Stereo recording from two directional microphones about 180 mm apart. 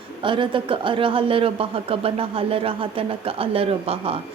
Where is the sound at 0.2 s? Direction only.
25° right (ahead or behind).